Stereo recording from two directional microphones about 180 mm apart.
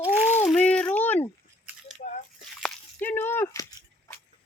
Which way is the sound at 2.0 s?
50° left (ahead or behind).